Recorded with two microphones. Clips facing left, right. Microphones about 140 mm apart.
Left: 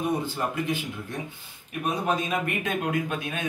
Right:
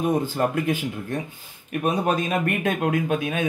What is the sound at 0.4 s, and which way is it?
Speech, 55° right (ahead or behind).